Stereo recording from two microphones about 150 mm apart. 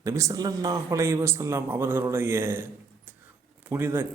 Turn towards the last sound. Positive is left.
turn(degrees=-15)  # may be behind; listen again after turning